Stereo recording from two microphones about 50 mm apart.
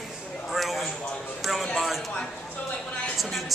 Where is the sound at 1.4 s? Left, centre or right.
Centre.